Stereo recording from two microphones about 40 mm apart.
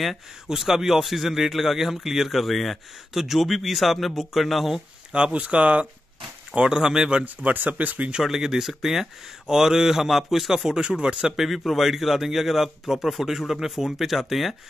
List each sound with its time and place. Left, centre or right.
0.5 s speech: centre
5.1 s speech: right
7.2 s speech: right
8.2 s speech: centre
11.3 s speech: centre